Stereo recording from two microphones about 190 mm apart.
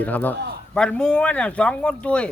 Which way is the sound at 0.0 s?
10° left (ahead or behind).